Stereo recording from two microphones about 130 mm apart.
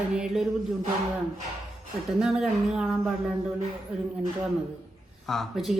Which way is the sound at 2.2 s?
5° right (ahead or behind).